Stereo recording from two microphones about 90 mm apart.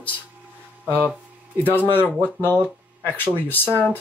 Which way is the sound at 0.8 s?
20° left (ahead or behind).